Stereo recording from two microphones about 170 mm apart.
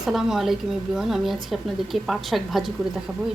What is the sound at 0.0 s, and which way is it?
Speech, centre (ahead or behind).